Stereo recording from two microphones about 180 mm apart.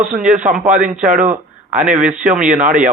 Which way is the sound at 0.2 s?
45° right (ahead or behind).